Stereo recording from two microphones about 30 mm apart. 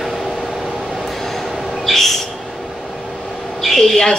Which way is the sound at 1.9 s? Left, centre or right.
Centre.